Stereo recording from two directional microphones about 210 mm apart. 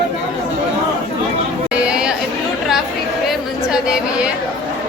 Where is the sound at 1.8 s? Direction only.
5° right (ahead or behind).